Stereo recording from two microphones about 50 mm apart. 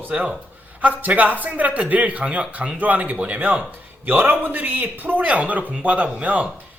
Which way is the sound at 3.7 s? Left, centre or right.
Right.